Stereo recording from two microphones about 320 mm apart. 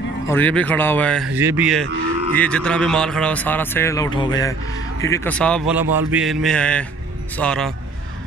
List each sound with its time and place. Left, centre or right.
0.3 s speech: centre